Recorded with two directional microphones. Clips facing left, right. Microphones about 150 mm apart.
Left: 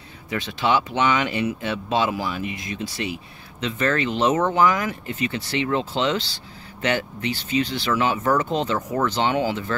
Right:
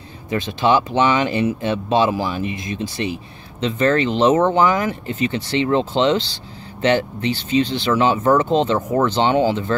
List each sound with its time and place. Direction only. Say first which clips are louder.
0.3 s speech: right 5 dB; 30° right (ahead or behind)